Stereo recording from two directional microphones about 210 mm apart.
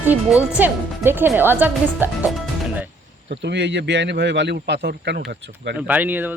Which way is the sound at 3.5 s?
60° right (ahead or behind).